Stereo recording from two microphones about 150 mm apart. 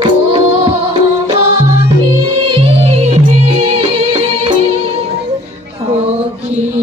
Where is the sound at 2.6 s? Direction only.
45° right (ahead or behind).